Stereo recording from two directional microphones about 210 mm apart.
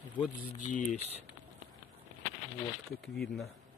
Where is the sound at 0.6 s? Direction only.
35° left (ahead or behind).